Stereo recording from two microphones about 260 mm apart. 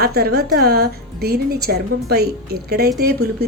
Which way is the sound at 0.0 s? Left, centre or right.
Right.